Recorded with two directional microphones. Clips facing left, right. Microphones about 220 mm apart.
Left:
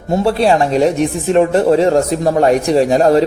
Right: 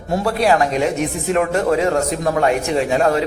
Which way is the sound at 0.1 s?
30° left (ahead or behind).